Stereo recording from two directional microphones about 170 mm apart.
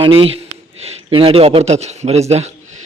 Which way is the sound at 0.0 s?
35° right (ahead or behind).